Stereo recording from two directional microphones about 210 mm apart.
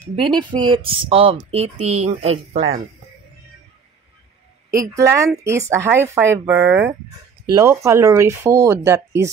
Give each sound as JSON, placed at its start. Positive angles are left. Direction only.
{"t": 0.4, "sound": "speech", "side_deg": -20}
{"t": 4.9, "sound": "speech", "side_deg": -15}